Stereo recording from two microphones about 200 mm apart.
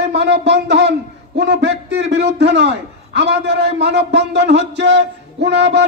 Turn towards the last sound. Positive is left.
turn(degrees=-60)  # may be behind; listen again after turning